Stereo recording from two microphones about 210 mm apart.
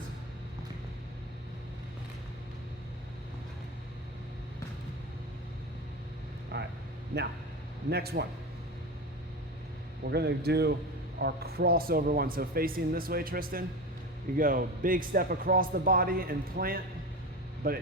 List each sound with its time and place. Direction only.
6.5 s vehicle: 50° right (ahead or behind)
7.9 s speech: 50° right (ahead or behind)
10.0 s speech: 50° right (ahead or behind)